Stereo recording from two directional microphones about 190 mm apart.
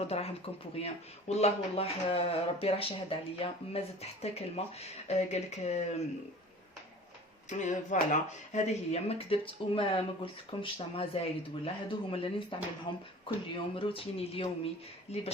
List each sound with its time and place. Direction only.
0.0 s speech: 35° left (ahead or behind)
7.5 s speech: 40° left (ahead or behind)